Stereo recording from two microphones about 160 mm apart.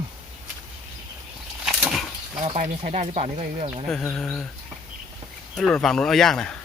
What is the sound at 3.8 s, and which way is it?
Speech, 5° left (ahead or behind).